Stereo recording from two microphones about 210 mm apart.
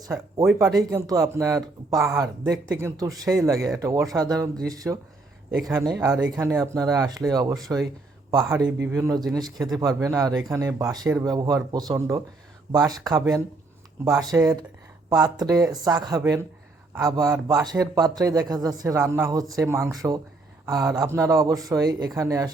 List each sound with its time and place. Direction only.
0.0 s speech: 15° right (ahead or behind)